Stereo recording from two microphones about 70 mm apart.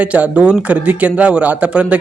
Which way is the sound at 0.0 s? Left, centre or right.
Centre.